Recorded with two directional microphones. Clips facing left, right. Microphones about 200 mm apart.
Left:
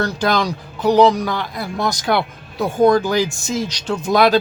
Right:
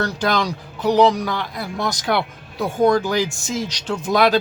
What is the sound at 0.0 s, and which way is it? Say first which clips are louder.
Speech: left 2 dB; 35° left (ahead or behind).